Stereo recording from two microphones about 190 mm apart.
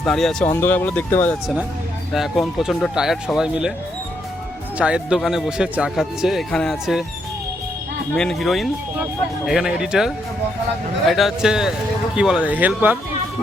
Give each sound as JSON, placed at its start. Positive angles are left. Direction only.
{"t": 0.0, "sound": "a man's voice", "side_deg": 0}
{"t": 4.8, "sound": "a man's voice", "side_deg": -5}
{"t": 8.1, "sound": "a man's voice", "side_deg": 5}
{"t": 11.1, "sound": "a man's voice", "side_deg": 0}